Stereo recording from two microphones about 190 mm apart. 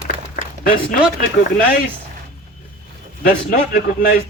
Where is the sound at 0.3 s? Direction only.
50° left (ahead or behind).